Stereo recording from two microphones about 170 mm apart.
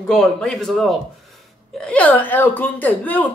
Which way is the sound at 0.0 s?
5° left (ahead or behind).